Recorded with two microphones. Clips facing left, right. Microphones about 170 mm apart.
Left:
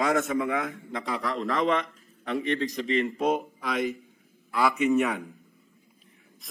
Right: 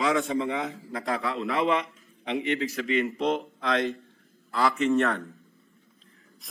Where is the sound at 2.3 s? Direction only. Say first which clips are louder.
Even; 40° left (ahead or behind).